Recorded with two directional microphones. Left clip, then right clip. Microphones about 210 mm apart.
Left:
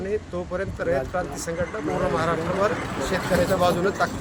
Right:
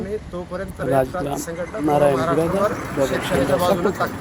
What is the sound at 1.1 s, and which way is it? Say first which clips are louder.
Speech: right 1 dB; 10° left (ahead or behind).